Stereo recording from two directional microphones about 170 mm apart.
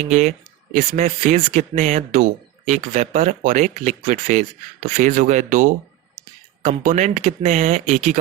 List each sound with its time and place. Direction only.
0.1 s speech: 45° right (ahead or behind)